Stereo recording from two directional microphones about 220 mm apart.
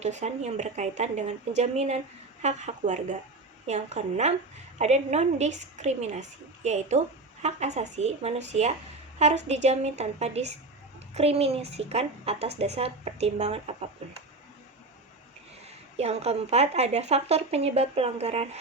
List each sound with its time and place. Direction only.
0.0 s a woman's voice: 30° right (ahead or behind)
16.0 s a woman's voice: 30° right (ahead or behind)